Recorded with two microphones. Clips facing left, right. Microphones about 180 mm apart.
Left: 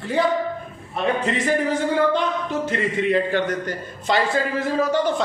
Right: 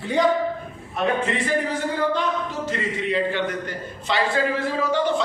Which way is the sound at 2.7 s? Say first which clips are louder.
Left 5 dB; 50° left (ahead or behind).